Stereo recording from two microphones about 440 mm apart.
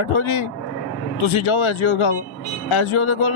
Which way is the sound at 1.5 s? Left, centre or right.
Left.